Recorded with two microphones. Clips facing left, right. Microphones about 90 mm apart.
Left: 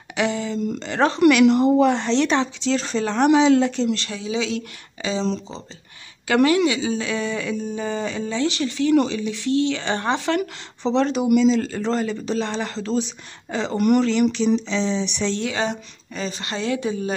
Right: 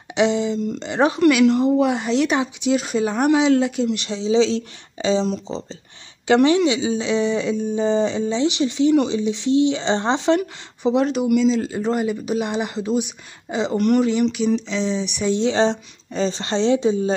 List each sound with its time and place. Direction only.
0.1 s a sound: 20° right (ahead or behind)
0.7 s speech: 15° right (ahead or behind)
3.9 s speech: 20° right (ahead or behind)
6.2 s speech: 25° right (ahead or behind)
13.7 s speech: 5° left (ahead or behind)
15.3 s speech: 25° right (ahead or behind)